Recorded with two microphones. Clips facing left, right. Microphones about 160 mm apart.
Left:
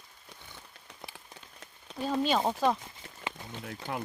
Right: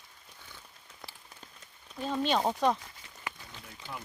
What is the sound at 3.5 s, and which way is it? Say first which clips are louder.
Speech: left 7 dB; 65° left (ahead or behind).